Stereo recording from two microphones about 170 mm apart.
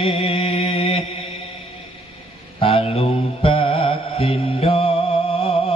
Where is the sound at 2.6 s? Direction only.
35° left (ahead or behind).